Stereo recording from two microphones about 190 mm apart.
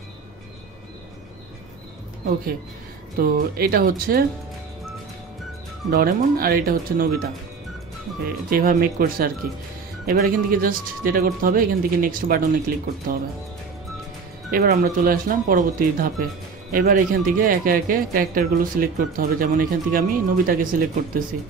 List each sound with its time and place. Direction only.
3.2 s speech: 50° right (ahead or behind)
5.9 s speech: 50° right (ahead or behind)
8.5 s speech: 50° right (ahead or behind)
14.5 s speech: 45° right (ahead or behind)